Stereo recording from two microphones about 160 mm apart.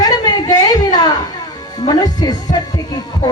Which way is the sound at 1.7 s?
25° left (ahead or behind).